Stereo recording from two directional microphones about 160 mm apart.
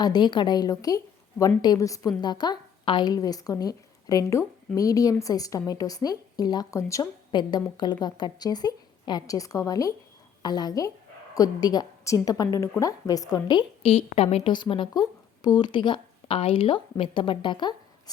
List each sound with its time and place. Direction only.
0.0 s a woman's voice: 25° left (ahead or behind)